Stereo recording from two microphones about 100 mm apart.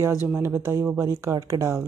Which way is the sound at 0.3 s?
25° right (ahead or behind).